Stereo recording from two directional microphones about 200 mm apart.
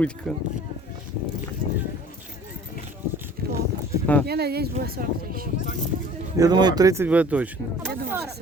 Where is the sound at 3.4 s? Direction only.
50° right (ahead or behind).